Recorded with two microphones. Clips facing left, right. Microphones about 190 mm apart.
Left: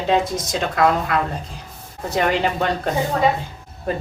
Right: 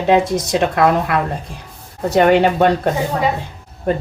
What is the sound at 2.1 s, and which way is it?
Speech, 60° right (ahead or behind).